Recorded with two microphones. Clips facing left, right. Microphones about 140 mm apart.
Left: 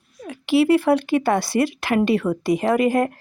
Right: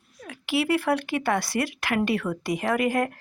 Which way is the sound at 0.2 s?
25° left (ahead or behind).